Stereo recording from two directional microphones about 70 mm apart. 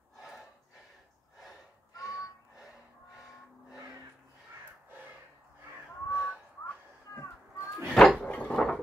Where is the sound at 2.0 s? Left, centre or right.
Left.